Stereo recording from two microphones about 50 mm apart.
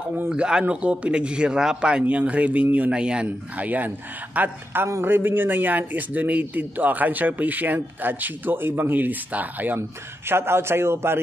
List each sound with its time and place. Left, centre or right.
0.3 s a man's voice: centre; by 2.9 s right
2.9 s a man's voice: centre
3.5 s a man's voice: right
5.0 s a man's voice: right
9.8 s a man's voice: right